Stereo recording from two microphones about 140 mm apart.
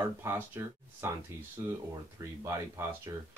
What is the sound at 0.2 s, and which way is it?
Speech, 20° right (ahead or behind).